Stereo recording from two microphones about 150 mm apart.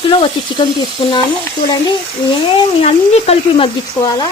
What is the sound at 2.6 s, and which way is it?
Frying, 40° left (ahead or behind).